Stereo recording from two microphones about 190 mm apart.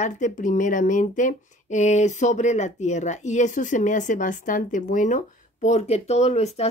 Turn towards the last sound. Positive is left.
turn(degrees=35)  # may be behind; listen again after turning